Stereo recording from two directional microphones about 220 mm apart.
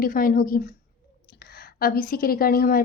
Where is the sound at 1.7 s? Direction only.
40° left (ahead or behind).